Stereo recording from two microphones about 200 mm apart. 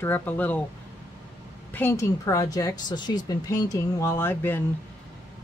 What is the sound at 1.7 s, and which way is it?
Speech, 10° left (ahead or behind).